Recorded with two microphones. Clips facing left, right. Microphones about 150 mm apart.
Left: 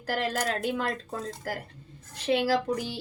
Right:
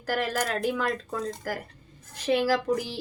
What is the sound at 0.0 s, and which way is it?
A woman's voice, 30° left (ahead or behind).